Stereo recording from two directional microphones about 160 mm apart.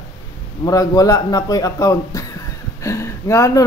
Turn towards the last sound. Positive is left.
turn(degrees=20)  # may be behind; listen again after turning